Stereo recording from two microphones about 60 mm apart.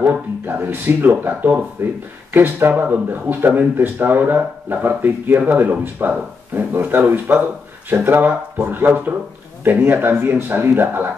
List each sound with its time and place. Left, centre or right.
0.0 s speech: right